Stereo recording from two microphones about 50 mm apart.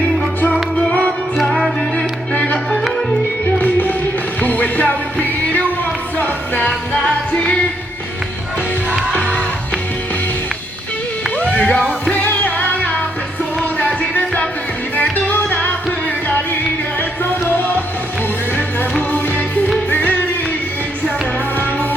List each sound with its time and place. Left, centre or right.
0.8 s music: left
2.3 s music: left
3.6 s music: left
7.3 s music: centre
9.1 s music: left
11.3 s a sound: left
12.1 s music: left
18.5 s music: left